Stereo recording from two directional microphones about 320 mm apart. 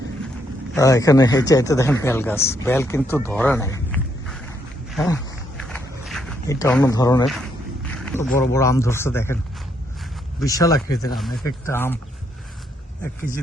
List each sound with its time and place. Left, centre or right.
0.7 s speech: centre
5.0 s walk: centre
7.9 s speech: centre
10.4 s speech: centre